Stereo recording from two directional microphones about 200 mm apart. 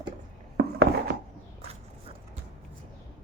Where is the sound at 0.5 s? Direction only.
50° right (ahead or behind).